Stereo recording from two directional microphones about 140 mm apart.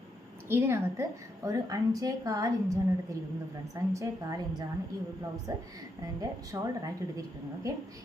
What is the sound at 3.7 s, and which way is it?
A woman's voice, 25° right (ahead or behind).